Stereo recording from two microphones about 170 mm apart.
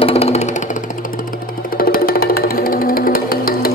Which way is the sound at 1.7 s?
60° left (ahead or behind).